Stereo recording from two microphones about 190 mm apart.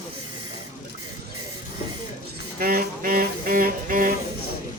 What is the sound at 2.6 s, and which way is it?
Music, 50° right (ahead or behind).